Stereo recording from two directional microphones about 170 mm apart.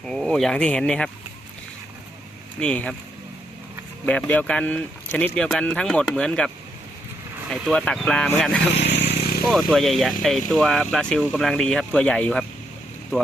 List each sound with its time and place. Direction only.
0.0 s speech: 5° left (ahead or behind)
2.6 s speech: 5° left (ahead or behind)
4.0 s speech: 10° left (ahead or behind)
7.5 s speech: centre (ahead or behind)
8.8 s vehicle: 90° left; by 9.4 s 70° left (ahead or behind)
9.5 s speech: centre (ahead or behind)